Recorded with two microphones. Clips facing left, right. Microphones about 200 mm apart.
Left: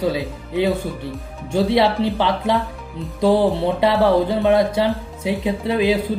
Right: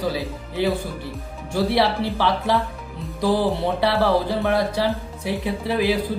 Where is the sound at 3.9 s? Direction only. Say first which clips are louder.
Left 4 dB; 15° left (ahead or behind).